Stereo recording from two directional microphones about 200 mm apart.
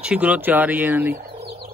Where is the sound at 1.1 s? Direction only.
40° right (ahead or behind).